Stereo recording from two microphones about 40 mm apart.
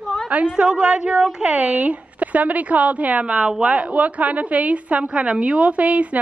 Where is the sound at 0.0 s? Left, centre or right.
Centre.